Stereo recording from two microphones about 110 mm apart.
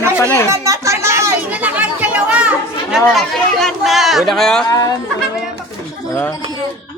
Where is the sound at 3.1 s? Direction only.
Centre (ahead or behind).